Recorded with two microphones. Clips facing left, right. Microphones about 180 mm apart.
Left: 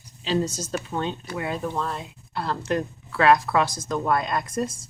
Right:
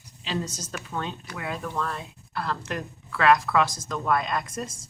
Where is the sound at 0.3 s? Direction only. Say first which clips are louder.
Left 7 dB; 30° left (ahead or behind).